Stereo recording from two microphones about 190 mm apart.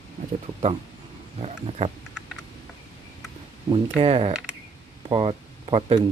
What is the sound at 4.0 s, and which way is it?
Speech, 30° right (ahead or behind).